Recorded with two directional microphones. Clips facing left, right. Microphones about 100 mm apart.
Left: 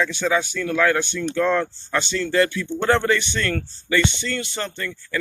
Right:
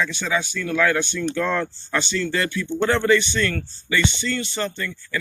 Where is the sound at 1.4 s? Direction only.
30° left (ahead or behind).